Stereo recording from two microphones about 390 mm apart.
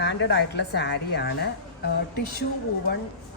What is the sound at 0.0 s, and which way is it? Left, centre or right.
A woman's voice, left.